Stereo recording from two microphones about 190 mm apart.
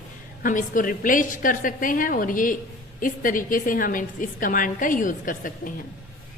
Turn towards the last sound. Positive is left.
turn(degrees=45)  # may be behind; listen again after turning